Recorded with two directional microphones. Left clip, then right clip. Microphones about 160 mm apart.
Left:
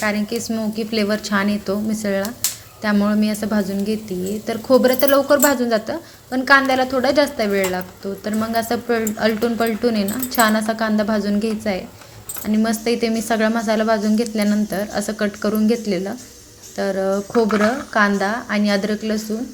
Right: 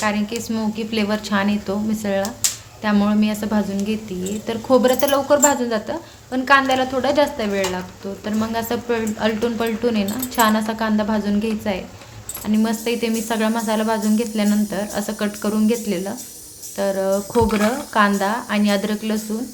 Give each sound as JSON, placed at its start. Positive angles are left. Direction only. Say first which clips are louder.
{"t": 0.0, "sound": "a woman's voice", "louder": "left 1 dB", "side_deg": 15}